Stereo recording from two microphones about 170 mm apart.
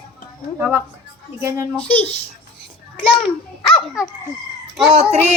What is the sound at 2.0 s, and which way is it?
Howl, 35° left (ahead or behind).